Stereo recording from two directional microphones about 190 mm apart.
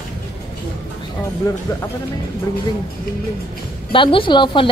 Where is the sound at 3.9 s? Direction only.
25° left (ahead or behind).